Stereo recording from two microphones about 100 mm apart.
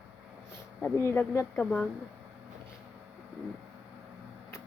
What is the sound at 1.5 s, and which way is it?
Speech, 10° left (ahead or behind).